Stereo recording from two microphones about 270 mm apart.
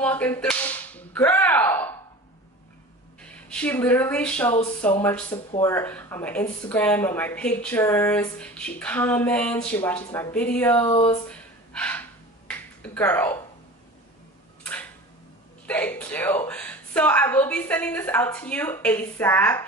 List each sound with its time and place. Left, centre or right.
0.0 s whip: centre
3.2 s speech: centre
10.9 s speech: left
11.2 s a sound: centre
14.6 s tick-tock: centre
15.6 s speech: centre